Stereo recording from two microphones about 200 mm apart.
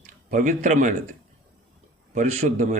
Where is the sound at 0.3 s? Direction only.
40° right (ahead or behind).